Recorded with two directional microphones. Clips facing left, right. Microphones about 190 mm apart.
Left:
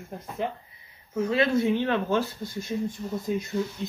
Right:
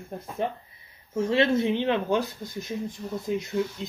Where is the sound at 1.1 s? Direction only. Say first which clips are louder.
Right 1 dB; 30° right (ahead or behind).